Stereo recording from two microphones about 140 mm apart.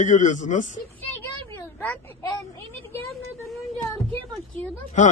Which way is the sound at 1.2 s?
15° left (ahead or behind).